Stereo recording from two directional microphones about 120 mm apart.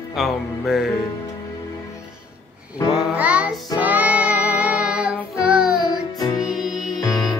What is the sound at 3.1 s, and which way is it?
Music, 10° right (ahead or behind).